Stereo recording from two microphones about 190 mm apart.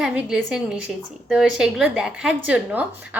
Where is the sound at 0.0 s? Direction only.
5° right (ahead or behind).